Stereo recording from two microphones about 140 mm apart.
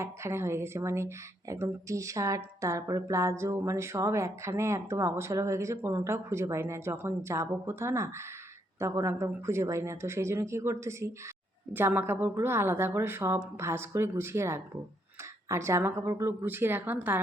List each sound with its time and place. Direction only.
0.0 s a woman's voice: 20° right (ahead or behind)